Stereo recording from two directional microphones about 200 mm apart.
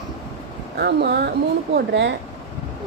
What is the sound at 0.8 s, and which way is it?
A woman's voice, 50° right (ahead or behind).